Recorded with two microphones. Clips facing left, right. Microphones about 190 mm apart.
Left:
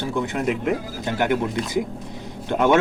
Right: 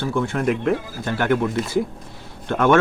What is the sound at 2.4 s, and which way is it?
Speech, 15° left (ahead or behind).